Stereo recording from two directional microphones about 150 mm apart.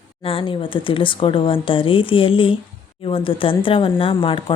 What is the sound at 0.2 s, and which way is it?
Speech, 35° left (ahead or behind).